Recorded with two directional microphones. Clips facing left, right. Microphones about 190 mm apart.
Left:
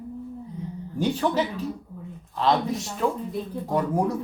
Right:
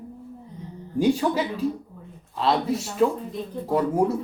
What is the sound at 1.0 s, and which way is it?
Speech, 10° right (ahead or behind).